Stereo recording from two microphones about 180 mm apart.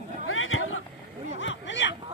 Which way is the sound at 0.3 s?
90° left.